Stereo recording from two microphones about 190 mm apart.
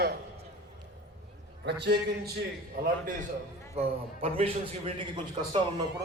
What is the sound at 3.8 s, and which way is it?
A man's voice, 30° right (ahead or behind).